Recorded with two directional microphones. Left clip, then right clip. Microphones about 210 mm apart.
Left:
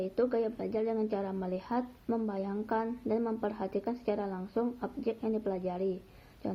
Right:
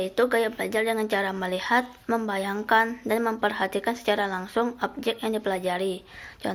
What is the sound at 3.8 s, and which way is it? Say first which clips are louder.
Speech: right 9 dB; 45° right (ahead or behind).